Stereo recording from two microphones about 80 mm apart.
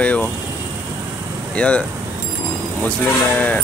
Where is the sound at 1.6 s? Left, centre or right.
Centre.